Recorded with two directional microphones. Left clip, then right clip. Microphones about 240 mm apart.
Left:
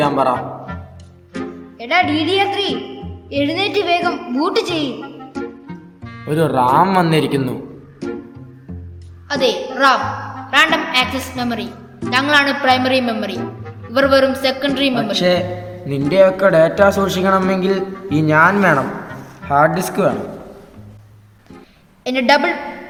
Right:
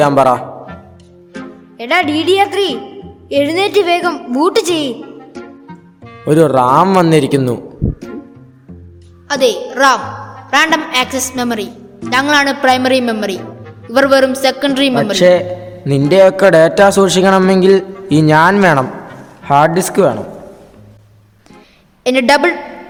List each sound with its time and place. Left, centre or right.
0.0 s a man's voice: right
1.3 s music: centre
1.8 s a man's voice: right
5.3 s music: centre
6.2 s a man's voice: right
9.2 s a woman's voice: right
22.0 s a man's voice: right